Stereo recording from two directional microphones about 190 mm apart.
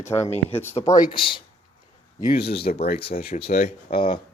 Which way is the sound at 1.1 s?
25° left (ahead or behind).